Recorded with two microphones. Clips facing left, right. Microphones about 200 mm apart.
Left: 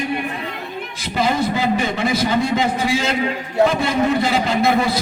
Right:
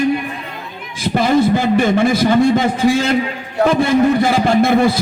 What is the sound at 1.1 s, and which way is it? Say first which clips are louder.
A man's voice: right 6 dB; 50° right (ahead or behind).